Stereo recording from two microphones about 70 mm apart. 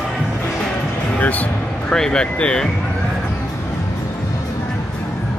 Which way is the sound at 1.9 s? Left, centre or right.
Centre.